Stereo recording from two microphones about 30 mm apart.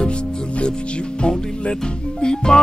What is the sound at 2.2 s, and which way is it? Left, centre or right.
Music, left.